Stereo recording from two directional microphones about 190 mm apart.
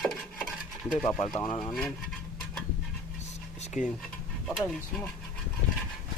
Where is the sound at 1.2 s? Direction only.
25° left (ahead or behind).